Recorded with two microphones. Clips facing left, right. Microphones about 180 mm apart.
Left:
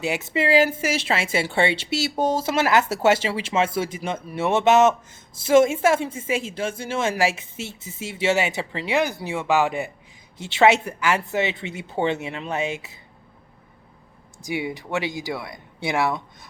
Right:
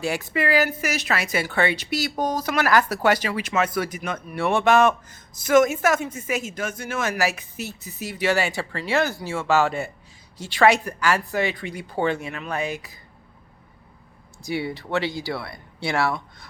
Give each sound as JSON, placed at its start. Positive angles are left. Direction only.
{"t": 0.0, "sound": "speech", "side_deg": 20}
{"t": 14.4, "sound": "speech", "side_deg": 15}